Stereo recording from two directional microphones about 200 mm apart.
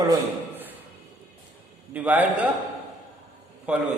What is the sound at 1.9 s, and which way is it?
Speech, 10° right (ahead or behind).